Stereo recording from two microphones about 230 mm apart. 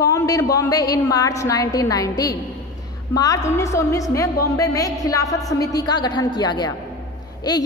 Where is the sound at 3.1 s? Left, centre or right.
Centre.